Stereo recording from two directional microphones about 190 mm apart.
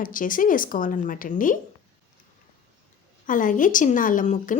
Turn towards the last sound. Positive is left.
turn(degrees=40)  # may be behind; listen again after turning